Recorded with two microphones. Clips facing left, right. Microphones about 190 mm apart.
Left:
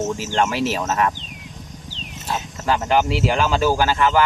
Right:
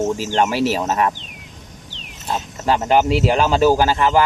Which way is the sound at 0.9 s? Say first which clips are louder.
Right 2 dB; 25° right (ahead or behind).